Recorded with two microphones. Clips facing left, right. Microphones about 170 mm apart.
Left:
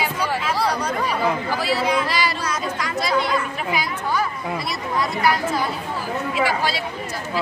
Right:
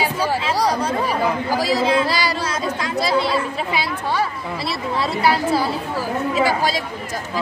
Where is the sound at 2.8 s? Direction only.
30° right (ahead or behind).